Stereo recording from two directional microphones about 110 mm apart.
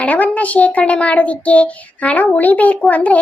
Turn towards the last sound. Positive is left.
turn(degrees=15)  # may be behind; listen again after turning